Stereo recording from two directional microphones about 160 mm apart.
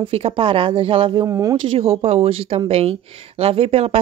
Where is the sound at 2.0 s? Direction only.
40° right (ahead or behind).